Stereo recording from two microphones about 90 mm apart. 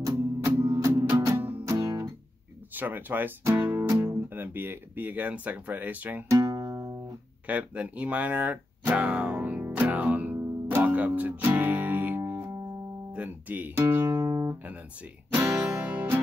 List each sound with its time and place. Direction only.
0.1 s music: 35° right (ahead or behind)
2.7 s speech: 20° right (ahead or behind)
6.2 s music: 40° right (ahead or behind)
7.4 s guitar: 15° right (ahead or behind)
13.1 s speech: 20° right (ahead or behind)
14.2 s speech: 40° right (ahead or behind)